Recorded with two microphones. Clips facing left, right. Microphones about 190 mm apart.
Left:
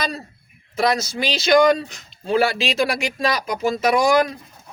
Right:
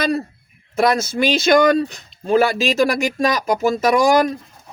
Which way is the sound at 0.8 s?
50° right (ahead or behind).